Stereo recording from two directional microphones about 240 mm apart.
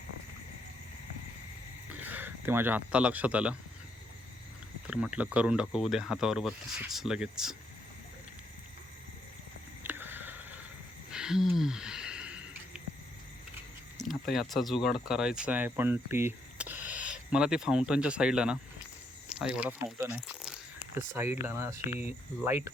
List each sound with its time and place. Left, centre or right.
2.0 s speech: centre
4.9 s speech: centre
9.8 s a sound: centre
14.0 s speech: centre